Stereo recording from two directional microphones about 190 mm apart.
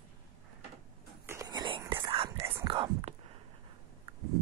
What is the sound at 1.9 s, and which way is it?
Whispering, 30° right (ahead or behind).